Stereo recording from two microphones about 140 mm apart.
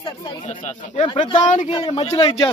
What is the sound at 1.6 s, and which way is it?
Speech, 35° left (ahead or behind).